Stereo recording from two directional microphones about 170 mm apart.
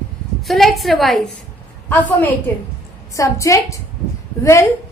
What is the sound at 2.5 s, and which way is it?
A woman's voice, 10° left (ahead or behind).